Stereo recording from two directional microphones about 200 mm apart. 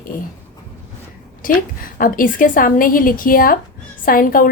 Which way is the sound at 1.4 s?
45° left (ahead or behind).